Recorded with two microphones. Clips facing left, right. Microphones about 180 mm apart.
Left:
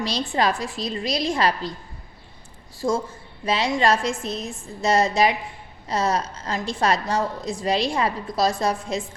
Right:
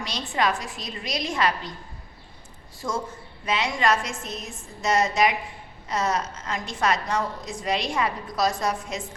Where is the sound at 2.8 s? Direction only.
30° left (ahead or behind).